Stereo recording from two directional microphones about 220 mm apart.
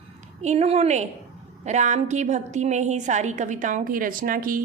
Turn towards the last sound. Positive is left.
turn(degrees=-40)  # may be behind; listen again after turning